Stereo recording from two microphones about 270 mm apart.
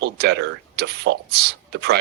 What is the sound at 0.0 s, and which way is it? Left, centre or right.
Speech, right.